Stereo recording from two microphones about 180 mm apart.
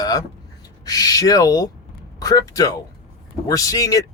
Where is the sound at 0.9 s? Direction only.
20° left (ahead or behind).